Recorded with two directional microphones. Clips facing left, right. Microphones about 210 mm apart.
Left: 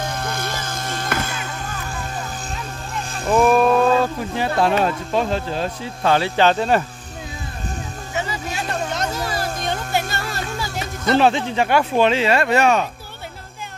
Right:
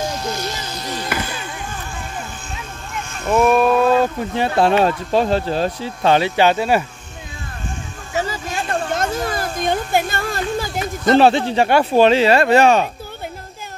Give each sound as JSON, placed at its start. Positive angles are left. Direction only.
{"t": 0.0, "sound": "music", "side_deg": 55}
{"t": 3.3, "sound": "a sound", "side_deg": 0}
{"t": 4.0, "sound": "speech", "side_deg": -25}
{"t": 6.0, "sound": "speech", "side_deg": -15}
{"t": 8.1, "sound": "a sound", "side_deg": -40}
{"t": 11.1, "sound": "speech", "side_deg": -35}